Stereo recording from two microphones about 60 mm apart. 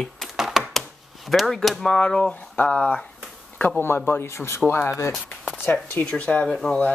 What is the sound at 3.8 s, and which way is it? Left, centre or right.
Speech, left.